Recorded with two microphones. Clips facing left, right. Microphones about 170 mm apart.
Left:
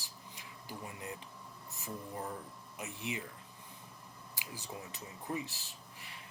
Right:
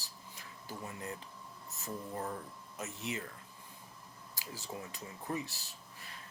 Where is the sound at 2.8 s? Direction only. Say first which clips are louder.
Right 1 dB; 15° left (ahead or behind).